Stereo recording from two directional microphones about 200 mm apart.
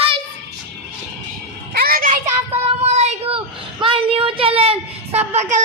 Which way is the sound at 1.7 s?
45° right (ahead or behind).